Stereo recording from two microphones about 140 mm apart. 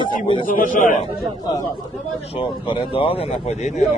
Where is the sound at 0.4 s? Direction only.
70° left (ahead or behind).